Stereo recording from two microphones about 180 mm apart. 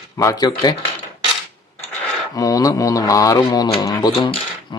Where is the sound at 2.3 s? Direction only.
20° left (ahead or behind).